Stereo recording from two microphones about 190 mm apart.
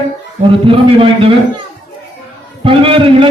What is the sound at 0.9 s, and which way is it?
Speech, 30° right (ahead or behind).